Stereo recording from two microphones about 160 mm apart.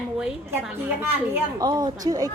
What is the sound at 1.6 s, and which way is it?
Speech, 25° right (ahead or behind).